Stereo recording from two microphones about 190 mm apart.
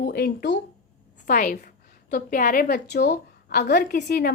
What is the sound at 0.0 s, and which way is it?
Speech, 55° left (ahead or behind).